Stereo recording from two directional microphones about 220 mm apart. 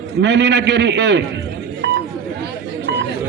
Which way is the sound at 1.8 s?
50° right (ahead or behind).